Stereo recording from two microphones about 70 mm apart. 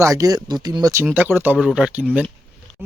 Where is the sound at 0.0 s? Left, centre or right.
Right.